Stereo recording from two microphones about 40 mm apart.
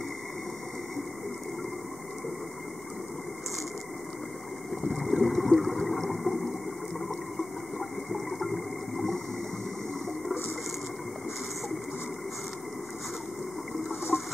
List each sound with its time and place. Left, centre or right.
4.8 s water: centre
8.1 s water: centre
14.1 s chicken: centre